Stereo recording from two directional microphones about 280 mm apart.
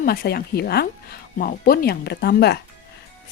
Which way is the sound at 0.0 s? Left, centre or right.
Left.